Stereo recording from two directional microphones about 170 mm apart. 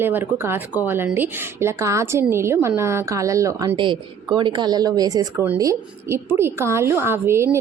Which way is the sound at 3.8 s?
30° right (ahead or behind).